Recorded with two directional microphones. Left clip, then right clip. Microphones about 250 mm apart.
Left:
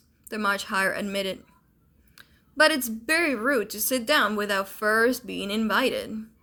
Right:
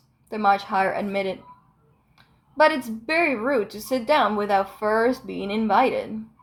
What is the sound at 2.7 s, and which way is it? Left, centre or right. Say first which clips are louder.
Speech: right 1 dB; centre.